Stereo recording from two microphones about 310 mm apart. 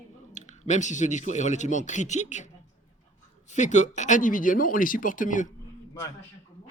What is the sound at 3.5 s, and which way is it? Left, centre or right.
Speech, left.